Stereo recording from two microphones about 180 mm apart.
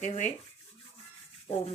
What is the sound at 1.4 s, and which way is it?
Rub, 35° left (ahead or behind).